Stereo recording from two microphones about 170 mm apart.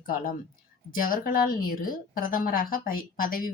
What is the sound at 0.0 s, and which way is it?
A woman's voice, 55° left (ahead or behind).